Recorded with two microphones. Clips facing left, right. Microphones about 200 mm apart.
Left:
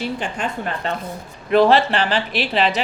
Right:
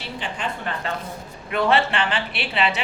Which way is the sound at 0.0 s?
45° left (ahead or behind).